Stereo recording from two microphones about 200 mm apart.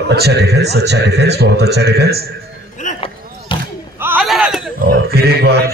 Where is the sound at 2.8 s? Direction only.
35° left (ahead or behind).